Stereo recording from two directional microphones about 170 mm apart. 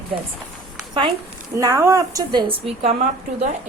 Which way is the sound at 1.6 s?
20° right (ahead or behind).